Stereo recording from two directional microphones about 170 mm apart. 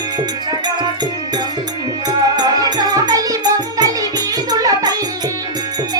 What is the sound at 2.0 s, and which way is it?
Music, 25° right (ahead or behind).